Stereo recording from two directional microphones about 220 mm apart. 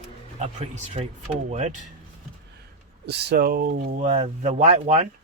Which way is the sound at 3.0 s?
50° right (ahead or behind).